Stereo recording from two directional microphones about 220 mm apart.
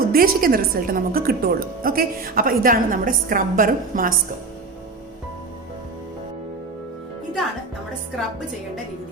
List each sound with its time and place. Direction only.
0.1 s a woman's voice: 40° right (ahead or behind)